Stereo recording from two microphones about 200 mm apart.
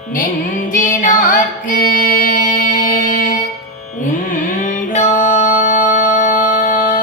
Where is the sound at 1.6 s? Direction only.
45° left (ahead or behind).